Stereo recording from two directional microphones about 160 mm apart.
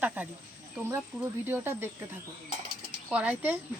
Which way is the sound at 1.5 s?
15° right (ahead or behind).